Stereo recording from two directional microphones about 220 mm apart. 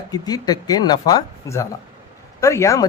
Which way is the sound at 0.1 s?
15° left (ahead or behind).